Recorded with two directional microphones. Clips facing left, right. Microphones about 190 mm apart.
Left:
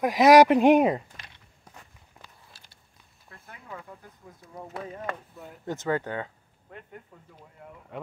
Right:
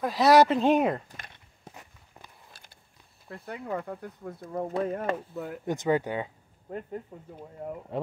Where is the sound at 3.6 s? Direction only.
60° right (ahead or behind).